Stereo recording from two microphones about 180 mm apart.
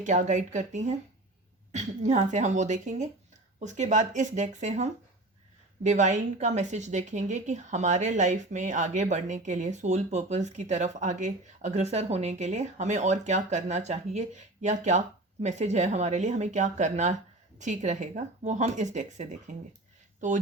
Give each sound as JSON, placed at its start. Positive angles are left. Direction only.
{"t": 0.0, "sound": "speech", "side_deg": -40}